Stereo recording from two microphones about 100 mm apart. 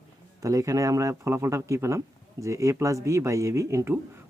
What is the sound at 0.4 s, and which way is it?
Speech, 35° right (ahead or behind).